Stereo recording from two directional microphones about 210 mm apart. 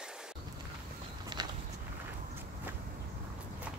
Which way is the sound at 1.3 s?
20° right (ahead or behind).